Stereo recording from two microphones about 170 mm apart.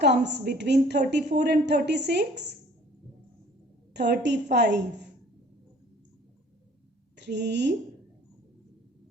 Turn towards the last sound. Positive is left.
turn(degrees=-90)